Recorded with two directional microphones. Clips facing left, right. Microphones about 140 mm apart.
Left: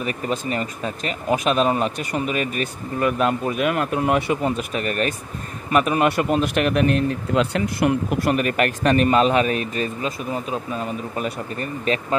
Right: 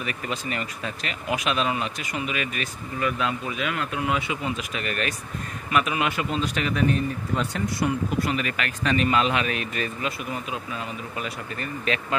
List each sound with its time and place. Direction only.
0.0 s speech: 35° left (ahead or behind)